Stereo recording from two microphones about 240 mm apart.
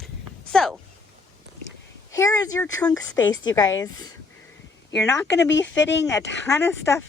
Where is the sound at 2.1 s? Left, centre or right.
Centre.